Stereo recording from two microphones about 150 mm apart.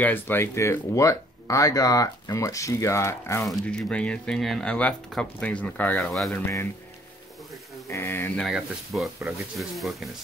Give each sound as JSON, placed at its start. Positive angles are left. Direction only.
{"t": 0.0, "sound": "speech", "side_deg": 15}
{"t": 3.4, "sound": "speech", "side_deg": 5}
{"t": 6.3, "sound": "speech", "side_deg": 15}
{"t": 7.9, "sound": "speech", "side_deg": 15}